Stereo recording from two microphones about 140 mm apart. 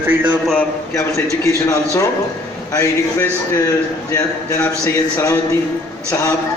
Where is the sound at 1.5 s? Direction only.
20° left (ahead or behind).